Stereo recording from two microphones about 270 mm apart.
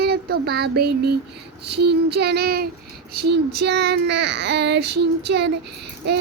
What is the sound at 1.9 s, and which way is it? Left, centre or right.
Speech, right.